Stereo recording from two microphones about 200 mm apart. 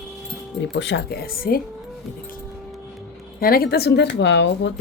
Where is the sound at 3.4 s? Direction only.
50° left (ahead or behind).